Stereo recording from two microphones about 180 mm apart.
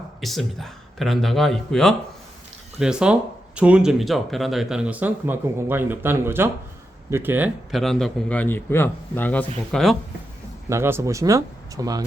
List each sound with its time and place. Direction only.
0.2 s a man's voice: centre (ahead or behind)
10.7 s speech: 15° right (ahead or behind)